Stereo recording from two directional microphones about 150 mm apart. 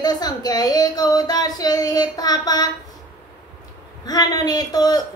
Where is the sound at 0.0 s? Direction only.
25° left (ahead or behind).